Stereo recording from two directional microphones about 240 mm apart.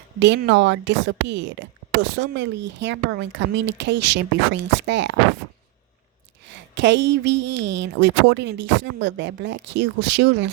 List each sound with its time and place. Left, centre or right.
0.2 s a woman's voice: right
6.5 s a woman's voice: right